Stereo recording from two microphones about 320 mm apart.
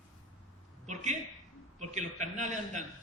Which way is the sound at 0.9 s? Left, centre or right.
Right.